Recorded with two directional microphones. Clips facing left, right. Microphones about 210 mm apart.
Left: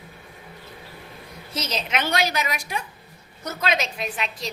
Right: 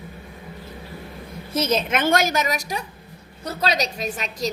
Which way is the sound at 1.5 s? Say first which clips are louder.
Right 7 dB; 55° right (ahead or behind).